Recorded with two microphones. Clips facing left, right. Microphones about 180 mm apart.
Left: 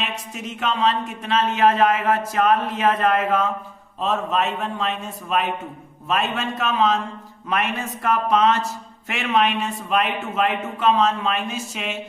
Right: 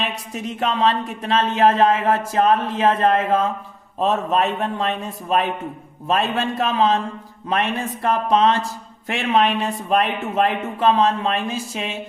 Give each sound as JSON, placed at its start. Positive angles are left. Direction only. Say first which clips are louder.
{"t": 0.0, "sound": "speech", "louder": "right 3 dB", "side_deg": -35}